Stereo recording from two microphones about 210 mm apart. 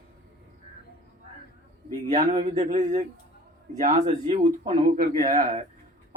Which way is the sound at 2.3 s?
30° right (ahead or behind).